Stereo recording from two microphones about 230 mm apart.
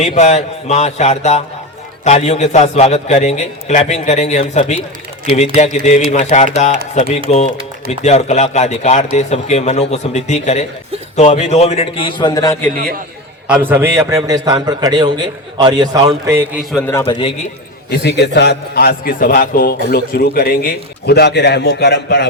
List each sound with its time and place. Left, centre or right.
0.0 s a man's voice: left; by 12.7 s centre
12.7 s a man's voice: right
13.5 s a man's voice: centre
16.7 s a man's voice: centre
17.9 s a man's voice: left